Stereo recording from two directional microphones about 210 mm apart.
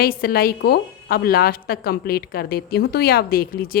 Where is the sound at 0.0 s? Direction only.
45° left (ahead or behind).